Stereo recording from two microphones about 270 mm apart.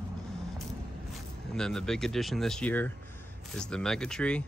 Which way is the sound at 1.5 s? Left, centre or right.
Centre.